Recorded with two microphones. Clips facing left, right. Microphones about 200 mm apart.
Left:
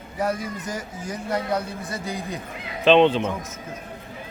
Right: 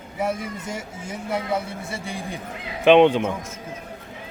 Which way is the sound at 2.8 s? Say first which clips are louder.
Right 2 dB; 15° right (ahead or behind).